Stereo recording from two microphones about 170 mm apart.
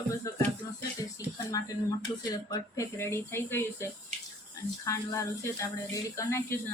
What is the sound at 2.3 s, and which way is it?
Speech, 20° left (ahead or behind).